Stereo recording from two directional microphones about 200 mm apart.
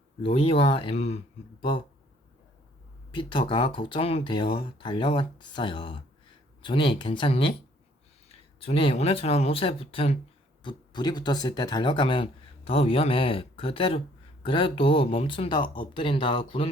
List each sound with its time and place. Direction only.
0.2 s speech: 30° left (ahead or behind)
3.1 s speech: 25° left (ahead or behind)